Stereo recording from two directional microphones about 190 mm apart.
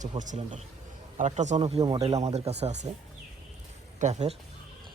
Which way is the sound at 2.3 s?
35° right (ahead or behind).